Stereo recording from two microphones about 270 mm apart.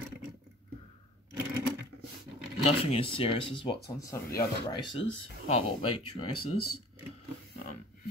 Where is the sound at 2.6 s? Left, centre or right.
Left.